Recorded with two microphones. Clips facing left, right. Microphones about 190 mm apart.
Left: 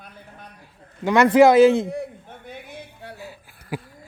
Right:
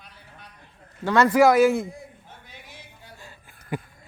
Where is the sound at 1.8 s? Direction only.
75° left (ahead or behind).